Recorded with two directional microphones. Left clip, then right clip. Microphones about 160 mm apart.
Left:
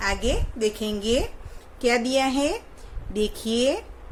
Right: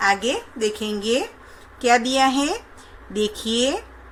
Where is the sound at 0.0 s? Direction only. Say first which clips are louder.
Right 6 dB; 15° left (ahead or behind).